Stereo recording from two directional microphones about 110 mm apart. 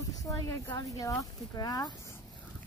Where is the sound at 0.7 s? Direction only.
35° left (ahead or behind).